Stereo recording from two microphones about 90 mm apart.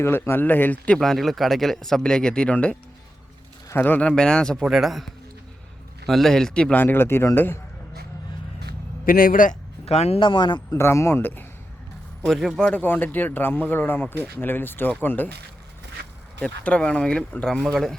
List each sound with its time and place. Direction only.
0.0 s speech: 25° left (ahead or behind)
0.9 s speech: 5° left (ahead or behind)
3.8 s speech: 20° left (ahead or behind)
4.1 s speech: 10° left (ahead or behind)
10.1 s speech: 65° left (ahead or behind)
10.7 s speech: 30° left (ahead or behind)
12.2 s speech: centre (ahead or behind)
12.6 s speech: 20° left (ahead or behind)
16.4 s speech: 10° left (ahead or behind)